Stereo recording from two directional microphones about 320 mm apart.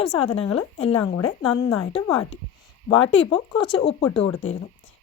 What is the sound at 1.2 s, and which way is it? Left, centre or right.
Speech, left.